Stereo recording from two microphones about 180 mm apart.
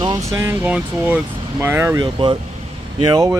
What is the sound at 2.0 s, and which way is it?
Speech, 25° right (ahead or behind).